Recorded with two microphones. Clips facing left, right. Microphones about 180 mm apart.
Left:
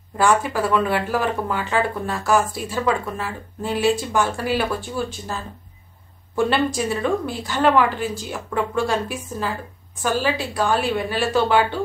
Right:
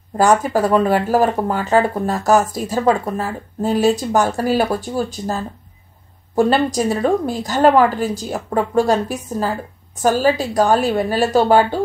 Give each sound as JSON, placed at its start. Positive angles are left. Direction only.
{"t": 0.2, "sound": "speech", "side_deg": -40}